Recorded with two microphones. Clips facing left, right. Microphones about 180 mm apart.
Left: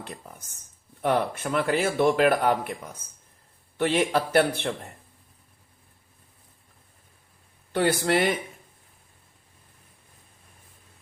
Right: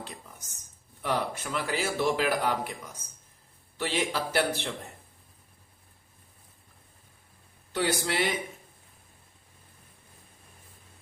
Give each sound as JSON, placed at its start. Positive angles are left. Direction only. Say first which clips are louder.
{"t": 0.0, "sound": "a man's voice", "louder": "left 3 dB", "side_deg": 55}
{"t": 3.8, "sound": "a man's voice", "louder": "left 7 dB", "side_deg": 55}
{"t": 7.7, "sound": "speech", "louder": "left 6 dB", "side_deg": 55}